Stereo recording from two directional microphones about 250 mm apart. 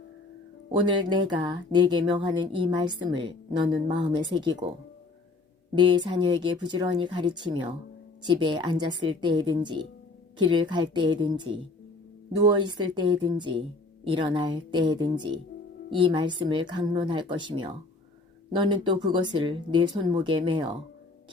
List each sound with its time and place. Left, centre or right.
0.8 s speech: centre
5.7 s speech: centre